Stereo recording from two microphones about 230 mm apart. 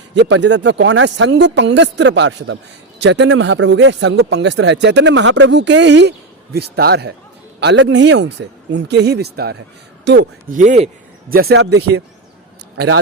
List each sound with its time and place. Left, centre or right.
0.1 s speech: right
10.5 s a man's voice: right